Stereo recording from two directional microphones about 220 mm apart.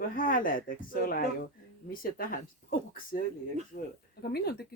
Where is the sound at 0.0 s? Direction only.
40° left (ahead or behind).